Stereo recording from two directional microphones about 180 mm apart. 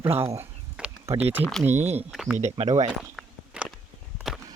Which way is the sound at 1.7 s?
40° right (ahead or behind).